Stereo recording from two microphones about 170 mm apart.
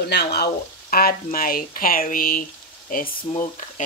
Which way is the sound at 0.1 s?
75° left (ahead or behind).